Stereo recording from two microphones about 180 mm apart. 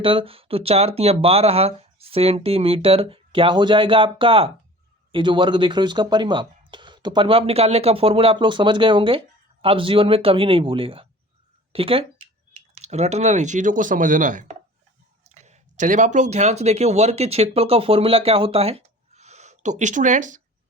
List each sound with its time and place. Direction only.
0.0 s speech: 30° right (ahead or behind)